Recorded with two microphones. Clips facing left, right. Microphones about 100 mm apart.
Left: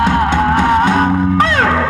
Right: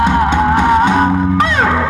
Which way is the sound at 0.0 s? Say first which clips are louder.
Right 1 dB; 15° right (ahead or behind).